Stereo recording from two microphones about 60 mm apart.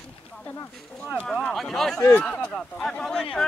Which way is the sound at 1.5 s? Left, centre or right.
Centre.